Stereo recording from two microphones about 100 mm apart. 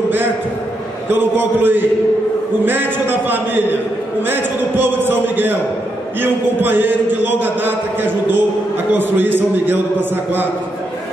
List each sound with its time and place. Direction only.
1.1 s a man's voice: 20° right (ahead or behind)